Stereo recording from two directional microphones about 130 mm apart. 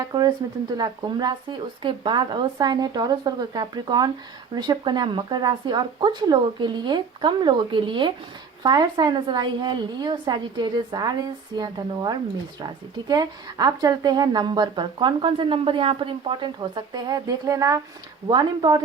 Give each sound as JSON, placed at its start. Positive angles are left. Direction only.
{"t": 0.0, "sound": "a woman's voice", "side_deg": -30}